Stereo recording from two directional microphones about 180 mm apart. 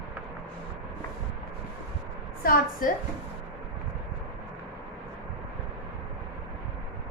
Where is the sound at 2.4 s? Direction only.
50° left (ahead or behind).